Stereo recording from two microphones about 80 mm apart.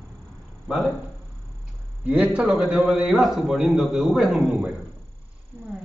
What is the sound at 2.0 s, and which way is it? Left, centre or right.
A man's voice, centre.